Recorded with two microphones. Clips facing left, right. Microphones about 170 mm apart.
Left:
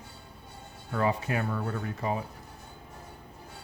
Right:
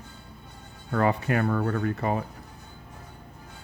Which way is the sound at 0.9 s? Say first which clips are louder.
Right 4 dB; 65° right (ahead or behind).